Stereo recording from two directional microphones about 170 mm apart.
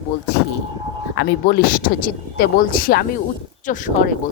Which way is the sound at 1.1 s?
65° left (ahead or behind).